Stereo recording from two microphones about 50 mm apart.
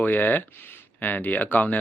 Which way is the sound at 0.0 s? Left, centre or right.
Left.